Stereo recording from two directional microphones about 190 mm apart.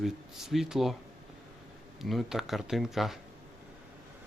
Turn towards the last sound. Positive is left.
turn(degrees=0)  # may be behind; listen again after turning